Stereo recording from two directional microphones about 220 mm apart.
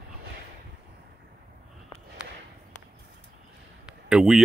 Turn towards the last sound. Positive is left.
turn(degrees=-5)  # may be behind; listen again after turning